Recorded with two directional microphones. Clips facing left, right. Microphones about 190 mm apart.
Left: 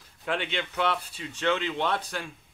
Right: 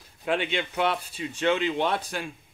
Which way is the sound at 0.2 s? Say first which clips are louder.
Right 4 dB; 15° right (ahead or behind).